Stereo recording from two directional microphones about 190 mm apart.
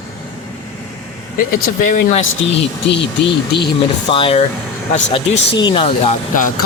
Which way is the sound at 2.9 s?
65° left (ahead or behind).